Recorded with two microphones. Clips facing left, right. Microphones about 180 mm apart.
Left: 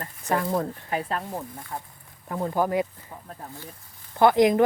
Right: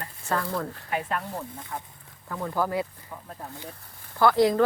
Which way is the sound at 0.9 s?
35° left (ahead or behind).